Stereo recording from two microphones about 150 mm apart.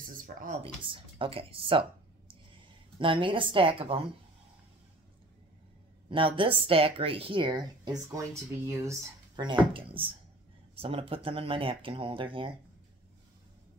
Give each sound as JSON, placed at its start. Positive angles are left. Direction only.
{"t": 0.6, "sound": "speech", "side_deg": -35}
{"t": 3.0, "sound": "speech", "side_deg": -35}
{"t": 6.0, "sound": "speech", "side_deg": -35}
{"t": 9.4, "sound": "speech", "side_deg": -35}